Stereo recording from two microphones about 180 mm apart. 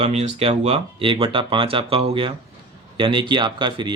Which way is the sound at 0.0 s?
35° right (ahead or behind).